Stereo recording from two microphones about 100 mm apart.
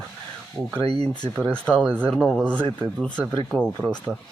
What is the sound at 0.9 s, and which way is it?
Speech, 45° left (ahead or behind).